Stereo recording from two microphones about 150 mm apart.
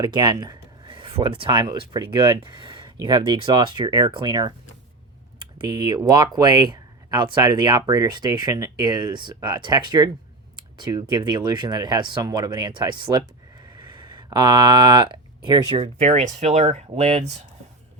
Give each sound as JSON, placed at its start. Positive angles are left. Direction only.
{"t": 0.0, "sound": "speech", "side_deg": -30}
{"t": 5.5, "sound": "speech", "side_deg": -30}